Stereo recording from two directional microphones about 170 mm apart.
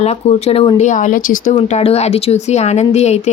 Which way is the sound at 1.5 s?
35° left (ahead or behind).